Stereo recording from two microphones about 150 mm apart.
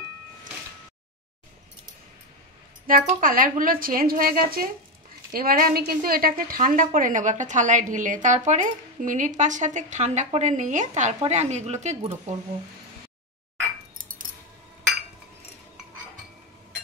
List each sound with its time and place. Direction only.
2.9 s a woman's voice: 65° right (ahead or behind); by 12.1 s 50° right (ahead or behind)